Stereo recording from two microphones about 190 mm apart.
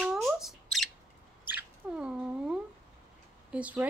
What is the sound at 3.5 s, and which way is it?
Speech, 5° right (ahead or behind).